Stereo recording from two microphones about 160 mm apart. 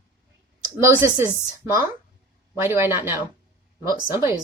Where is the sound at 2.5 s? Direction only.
15° right (ahead or behind).